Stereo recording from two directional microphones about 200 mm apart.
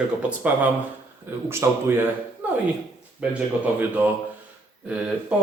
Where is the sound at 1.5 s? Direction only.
10° right (ahead or behind).